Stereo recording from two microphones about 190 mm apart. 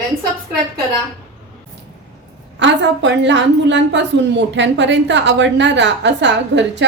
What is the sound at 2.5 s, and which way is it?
A woman's voice, 65° right (ahead or behind).